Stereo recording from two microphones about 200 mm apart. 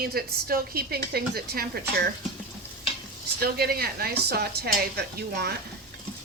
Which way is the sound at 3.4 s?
50° right (ahead or behind).